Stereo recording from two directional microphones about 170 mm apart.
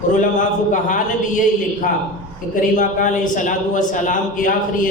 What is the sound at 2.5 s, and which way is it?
A man's voice, 50° left (ahead or behind).